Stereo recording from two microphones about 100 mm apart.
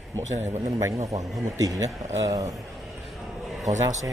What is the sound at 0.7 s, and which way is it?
Speech, 35° right (ahead or behind).